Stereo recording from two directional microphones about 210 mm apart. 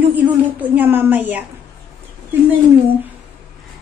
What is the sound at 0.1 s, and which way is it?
A woman's voice, 10° right (ahead or behind).